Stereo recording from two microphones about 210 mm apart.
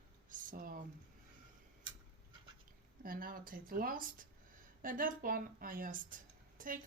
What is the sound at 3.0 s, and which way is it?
A woman's voice, 40° right (ahead or behind).